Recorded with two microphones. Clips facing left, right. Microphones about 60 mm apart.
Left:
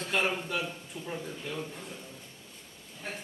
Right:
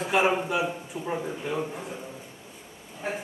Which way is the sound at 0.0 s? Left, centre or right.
Centre.